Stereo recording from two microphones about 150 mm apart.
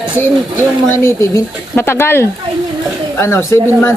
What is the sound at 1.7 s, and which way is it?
Speech, 15° left (ahead or behind).